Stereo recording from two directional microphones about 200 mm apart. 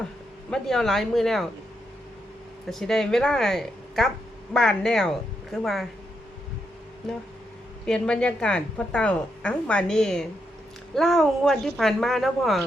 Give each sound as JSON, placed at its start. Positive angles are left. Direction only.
{"t": 0.5, "sound": "a woman's voice", "side_deg": 0}
{"t": 2.6, "sound": "a woman's voice", "side_deg": 0}
{"t": 7.9, "sound": "a woman's voice", "side_deg": 5}